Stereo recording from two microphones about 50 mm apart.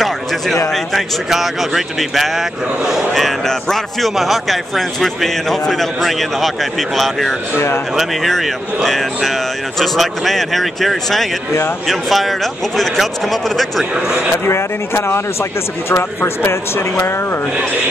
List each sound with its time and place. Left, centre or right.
0.9 s speech: centre
7.5 s speech: left
8.0 s speech: centre
14.4 s speech: left